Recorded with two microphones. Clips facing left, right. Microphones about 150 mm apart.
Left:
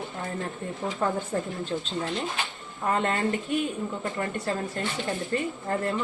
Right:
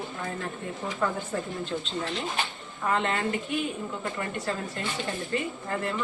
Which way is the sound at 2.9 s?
45° left (ahead or behind).